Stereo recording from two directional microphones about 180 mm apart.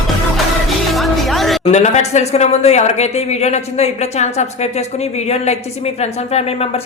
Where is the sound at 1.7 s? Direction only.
40° left (ahead or behind).